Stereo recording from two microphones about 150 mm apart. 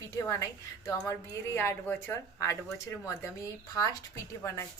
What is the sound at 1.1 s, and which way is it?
A woman's voice, 15° left (ahead or behind).